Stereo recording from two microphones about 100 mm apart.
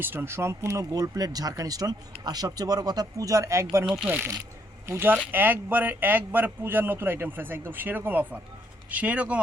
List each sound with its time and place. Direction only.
0.0 s speech: 20° right (ahead or behind)